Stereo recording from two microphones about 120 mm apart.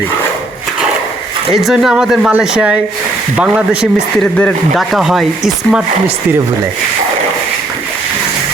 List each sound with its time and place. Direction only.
1.5 s speech: centre (ahead or behind)
4.2 s speech: 10° left (ahead or behind)